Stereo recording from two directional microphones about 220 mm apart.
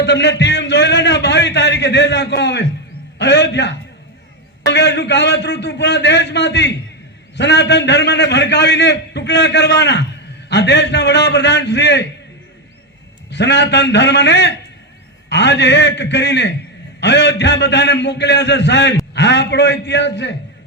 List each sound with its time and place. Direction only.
0.0 s a sound: 50° left (ahead or behind)
3.2 s a man's voice: 50° left (ahead or behind)
13.3 s a man's voice: 50° left (ahead or behind)